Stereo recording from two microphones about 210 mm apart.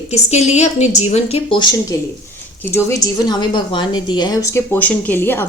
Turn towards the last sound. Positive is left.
turn(degrees=10)  # may be behind; listen again after turning